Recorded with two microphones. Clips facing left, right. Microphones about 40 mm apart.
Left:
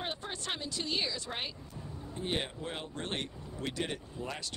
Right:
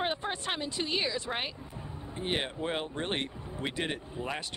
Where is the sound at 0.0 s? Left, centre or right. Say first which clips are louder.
Right 6 dB; right.